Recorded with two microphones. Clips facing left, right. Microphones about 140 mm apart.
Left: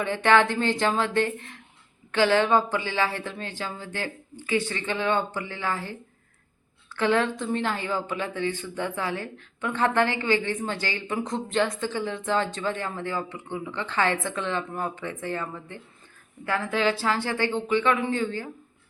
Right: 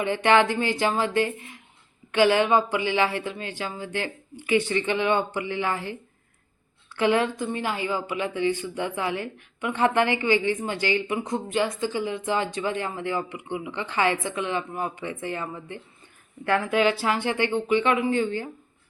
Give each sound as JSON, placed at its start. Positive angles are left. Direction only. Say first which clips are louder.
{"t": 0.0, "sound": "a woman's voice", "louder": "right 1 dB", "side_deg": -15}